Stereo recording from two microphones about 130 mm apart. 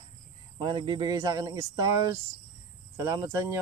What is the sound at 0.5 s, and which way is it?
Speech, 40° right (ahead or behind).